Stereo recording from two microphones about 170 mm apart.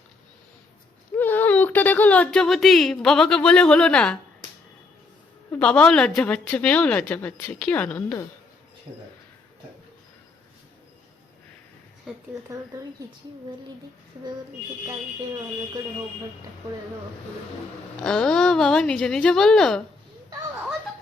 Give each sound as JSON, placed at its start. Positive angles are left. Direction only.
{"t": 1.1, "sound": "speech", "side_deg": 10}
{"t": 5.5, "sound": "a woman's voice", "side_deg": 5}
{"t": 12.3, "sound": "speech", "side_deg": -20}
{"t": 18.0, "sound": "speech", "side_deg": 5}